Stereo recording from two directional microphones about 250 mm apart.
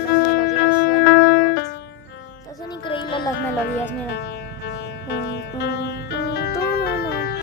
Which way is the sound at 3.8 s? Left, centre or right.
Left.